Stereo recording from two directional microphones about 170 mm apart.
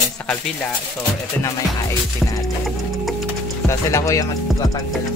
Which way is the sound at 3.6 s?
20° left (ahead or behind).